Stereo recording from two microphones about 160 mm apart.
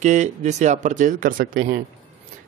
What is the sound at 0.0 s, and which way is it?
Speech, 50° right (ahead or behind).